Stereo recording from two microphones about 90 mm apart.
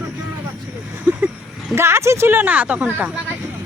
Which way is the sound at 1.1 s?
20° right (ahead or behind).